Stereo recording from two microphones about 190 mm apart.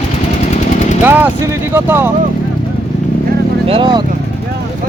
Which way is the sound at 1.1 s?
10° right (ahead or behind).